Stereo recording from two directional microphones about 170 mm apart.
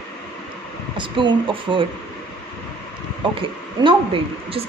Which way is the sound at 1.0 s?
30° right (ahead or behind).